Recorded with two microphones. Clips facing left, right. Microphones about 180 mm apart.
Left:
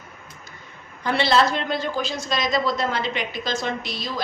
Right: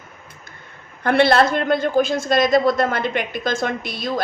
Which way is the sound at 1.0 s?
55° right (ahead or behind).